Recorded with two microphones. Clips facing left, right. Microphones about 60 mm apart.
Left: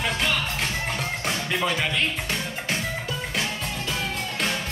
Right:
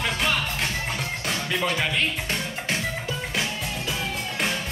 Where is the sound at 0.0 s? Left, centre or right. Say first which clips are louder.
Even; centre.